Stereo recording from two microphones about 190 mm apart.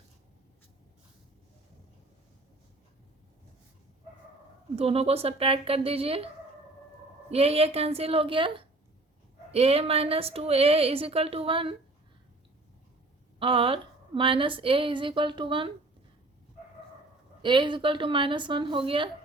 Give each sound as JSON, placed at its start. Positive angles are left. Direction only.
{"t": 4.8, "sound": "a woman's voice", "side_deg": -30}
{"t": 7.3, "sound": "a woman's voice", "side_deg": -30}
{"t": 13.4, "sound": "a woman's voice", "side_deg": -30}
{"t": 17.4, "sound": "a woman's voice", "side_deg": -25}